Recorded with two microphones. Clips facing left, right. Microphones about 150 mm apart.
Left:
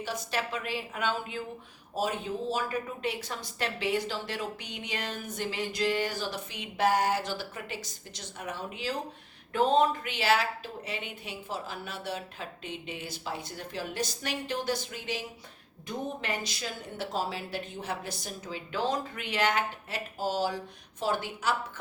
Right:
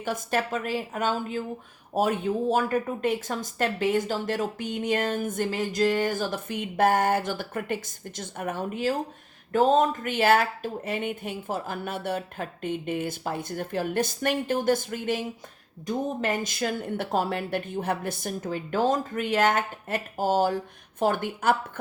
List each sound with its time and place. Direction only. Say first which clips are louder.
0.0 s a woman's voice: right 6 dB; 50° right (ahead or behind)
2.0 s a woman's voice: right 7 dB; 55° right (ahead or behind)